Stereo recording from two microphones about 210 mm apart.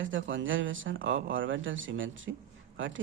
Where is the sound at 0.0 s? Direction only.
65° right (ahead or behind).